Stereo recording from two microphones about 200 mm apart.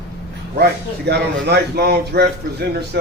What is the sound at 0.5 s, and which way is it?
A man's voice, 55° right (ahead or behind).